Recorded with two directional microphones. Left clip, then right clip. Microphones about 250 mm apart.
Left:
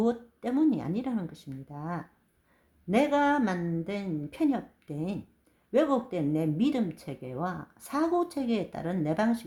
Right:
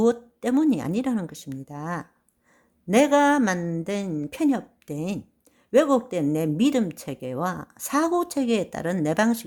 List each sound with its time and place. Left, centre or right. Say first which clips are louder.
0.0 s speech: right 7 dB; right